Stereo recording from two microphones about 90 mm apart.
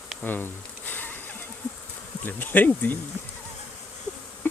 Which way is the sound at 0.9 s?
20° left (ahead or behind).